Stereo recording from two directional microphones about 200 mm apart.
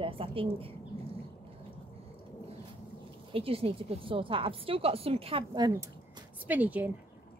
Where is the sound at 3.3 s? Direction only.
30° right (ahead or behind).